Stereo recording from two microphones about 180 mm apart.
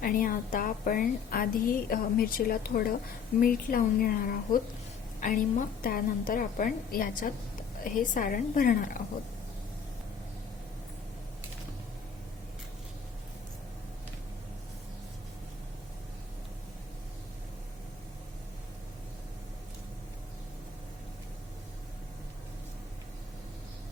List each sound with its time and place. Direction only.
0.0 s a woman's voice: 50° left (ahead or behind)